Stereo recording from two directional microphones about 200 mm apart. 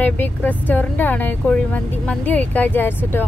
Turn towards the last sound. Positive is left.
turn(degrees=10)  # may be behind; listen again after turning